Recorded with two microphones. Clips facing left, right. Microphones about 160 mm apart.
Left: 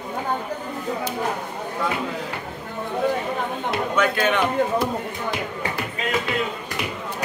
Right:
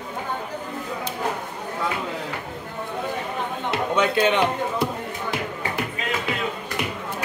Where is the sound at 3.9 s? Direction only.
25° right (ahead or behind).